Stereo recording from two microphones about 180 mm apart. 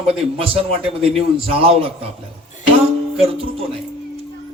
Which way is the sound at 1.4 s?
30° right (ahead or behind).